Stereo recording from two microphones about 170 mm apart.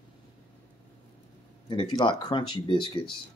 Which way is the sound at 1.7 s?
30° left (ahead or behind).